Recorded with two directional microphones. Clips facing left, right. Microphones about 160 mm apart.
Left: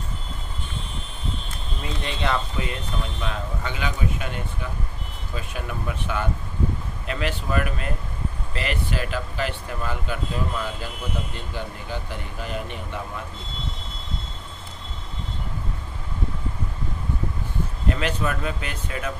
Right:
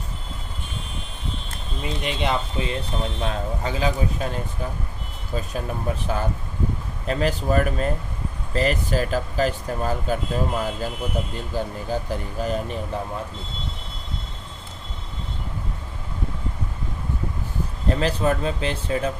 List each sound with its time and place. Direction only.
2.0 s speech: 20° right (ahead or behind)
3.0 s speech: 35° right (ahead or behind)
17.8 s speech: 35° right (ahead or behind)